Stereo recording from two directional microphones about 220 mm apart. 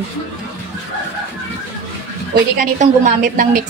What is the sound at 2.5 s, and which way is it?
A woman's voice, 35° right (ahead or behind).